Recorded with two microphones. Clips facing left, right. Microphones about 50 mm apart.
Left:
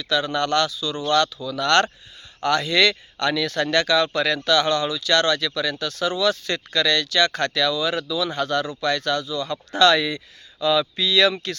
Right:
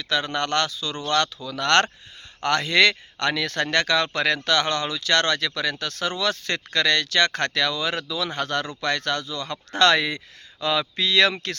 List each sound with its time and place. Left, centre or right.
0.0 s speech: right